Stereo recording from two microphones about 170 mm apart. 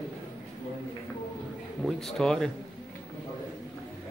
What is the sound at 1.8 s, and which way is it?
Speech, 5° left (ahead or behind).